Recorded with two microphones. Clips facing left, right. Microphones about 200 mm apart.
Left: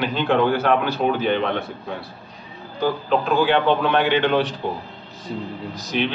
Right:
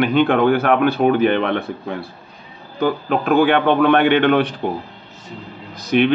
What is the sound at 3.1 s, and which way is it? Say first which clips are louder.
A man's voice: right 3 dB; 60° right (ahead or behind).